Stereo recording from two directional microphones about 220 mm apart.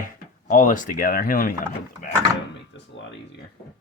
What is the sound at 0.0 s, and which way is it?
Speech, 35° left (ahead or behind).